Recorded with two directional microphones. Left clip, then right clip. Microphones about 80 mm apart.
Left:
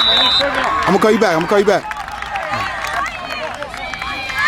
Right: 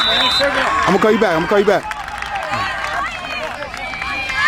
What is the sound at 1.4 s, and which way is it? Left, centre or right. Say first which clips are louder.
Speech: left 1 dB; centre.